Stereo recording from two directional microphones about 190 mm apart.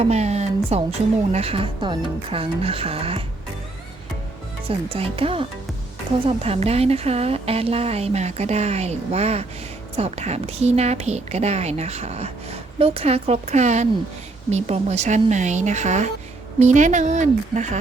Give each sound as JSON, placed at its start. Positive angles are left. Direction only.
{"t": 0.0, "sound": "a woman's voice", "side_deg": -35}
{"t": 4.9, "sound": "a woman's voice", "side_deg": -30}